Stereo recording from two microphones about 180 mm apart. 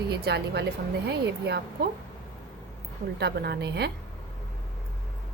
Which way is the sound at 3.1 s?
70° right (ahead or behind).